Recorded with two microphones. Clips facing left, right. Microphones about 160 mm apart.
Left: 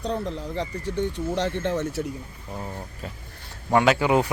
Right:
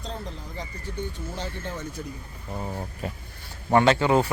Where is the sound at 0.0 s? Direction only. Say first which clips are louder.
Left 8 dB; 65° left (ahead or behind).